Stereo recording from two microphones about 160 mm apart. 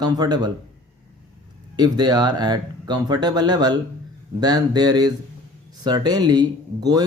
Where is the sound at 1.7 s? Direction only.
25° right (ahead or behind).